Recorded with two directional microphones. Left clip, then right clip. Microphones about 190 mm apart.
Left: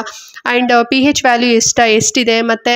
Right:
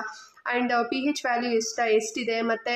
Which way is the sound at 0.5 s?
40° left (ahead or behind).